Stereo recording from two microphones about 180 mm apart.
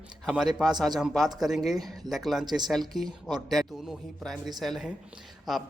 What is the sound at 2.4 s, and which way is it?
Speech, 25° right (ahead or behind).